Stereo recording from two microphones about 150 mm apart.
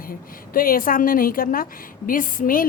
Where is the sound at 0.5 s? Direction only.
70° left (ahead or behind).